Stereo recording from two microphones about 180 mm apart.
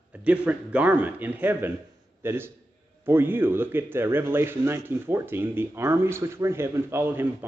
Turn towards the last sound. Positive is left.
turn(degrees=-10)  # may be behind; listen again after turning